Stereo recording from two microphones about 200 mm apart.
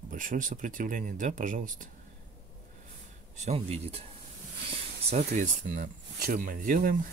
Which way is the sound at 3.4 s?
30° right (ahead or behind).